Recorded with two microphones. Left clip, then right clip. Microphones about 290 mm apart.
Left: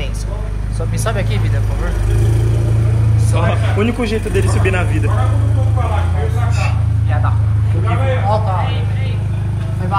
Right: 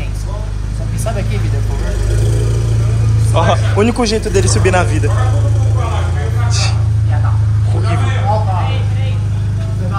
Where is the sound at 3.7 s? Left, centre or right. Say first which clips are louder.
Right 4 dB; centre.